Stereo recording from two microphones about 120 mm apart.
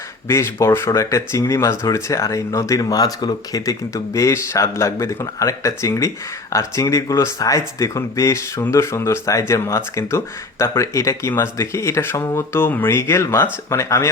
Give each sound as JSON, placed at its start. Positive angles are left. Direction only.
{"t": 0.3, "sound": "speech", "side_deg": 20}